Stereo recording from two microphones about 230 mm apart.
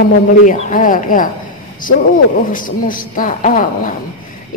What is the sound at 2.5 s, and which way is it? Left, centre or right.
A woman's voice, left.